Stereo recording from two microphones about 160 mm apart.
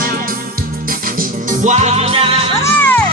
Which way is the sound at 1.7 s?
40° right (ahead or behind).